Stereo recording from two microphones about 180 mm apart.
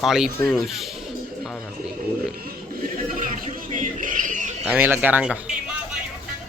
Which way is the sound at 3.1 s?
45° right (ahead or behind).